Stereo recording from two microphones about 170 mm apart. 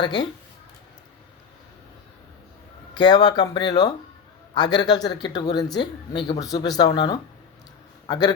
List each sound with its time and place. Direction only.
0.0 s speech: 25° left (ahead or behind)
2.9 s a man's voice: 25° left (ahead or behind)